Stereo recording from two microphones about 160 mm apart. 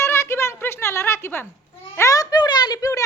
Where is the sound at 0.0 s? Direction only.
15° left (ahead or behind).